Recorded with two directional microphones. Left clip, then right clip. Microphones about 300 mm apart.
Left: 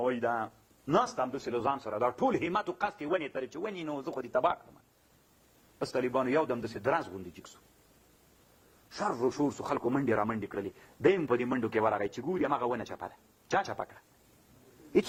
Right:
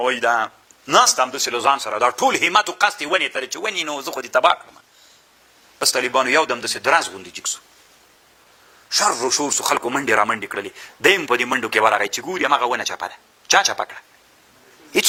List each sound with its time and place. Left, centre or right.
0.0 s speech: centre
5.9 s speech: centre
9.0 s speech: centre